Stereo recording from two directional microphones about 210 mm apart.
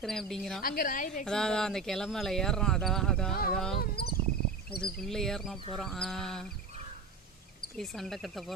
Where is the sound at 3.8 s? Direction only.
50° left (ahead or behind).